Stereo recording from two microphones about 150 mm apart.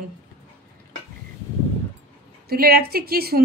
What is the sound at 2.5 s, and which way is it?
Speech, 90° right.